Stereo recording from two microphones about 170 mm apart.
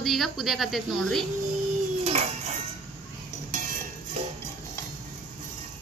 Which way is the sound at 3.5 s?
50° right (ahead or behind).